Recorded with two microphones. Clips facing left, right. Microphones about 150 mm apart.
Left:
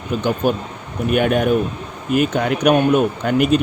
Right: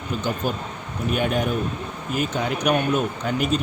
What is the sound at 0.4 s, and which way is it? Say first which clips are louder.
Speech: left 7 dB; 60° left (ahead or behind).